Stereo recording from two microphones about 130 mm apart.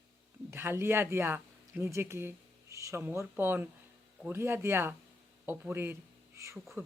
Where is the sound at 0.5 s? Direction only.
20° right (ahead or behind).